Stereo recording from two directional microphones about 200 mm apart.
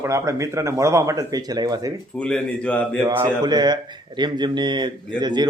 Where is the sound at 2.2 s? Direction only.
5° left (ahead or behind).